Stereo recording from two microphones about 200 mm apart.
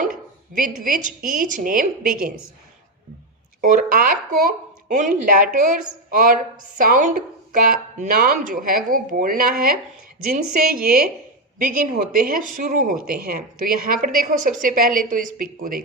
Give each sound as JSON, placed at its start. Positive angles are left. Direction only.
{"t": 0.0, "sound": "speech", "side_deg": -40}
{"t": 3.6, "sound": "speech", "side_deg": -45}